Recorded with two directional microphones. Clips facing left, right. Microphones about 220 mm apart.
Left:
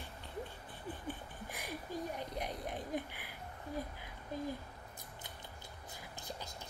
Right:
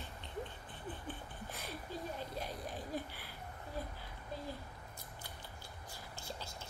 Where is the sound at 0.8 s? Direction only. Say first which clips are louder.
Left 2 dB; 15° left (ahead or behind).